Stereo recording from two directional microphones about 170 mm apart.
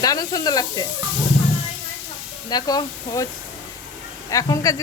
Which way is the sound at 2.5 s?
25° left (ahead or behind).